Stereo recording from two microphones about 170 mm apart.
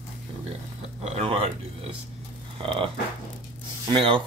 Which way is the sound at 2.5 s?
30° right (ahead or behind).